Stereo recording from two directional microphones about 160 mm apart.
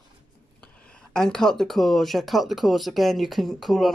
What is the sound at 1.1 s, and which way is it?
Speech, 5° left (ahead or behind).